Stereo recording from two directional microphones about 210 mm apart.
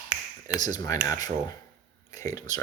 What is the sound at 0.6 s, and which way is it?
Speech, 20° left (ahead or behind).